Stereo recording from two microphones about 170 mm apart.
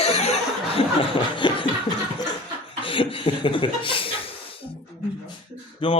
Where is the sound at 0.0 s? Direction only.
40° left (ahead or behind).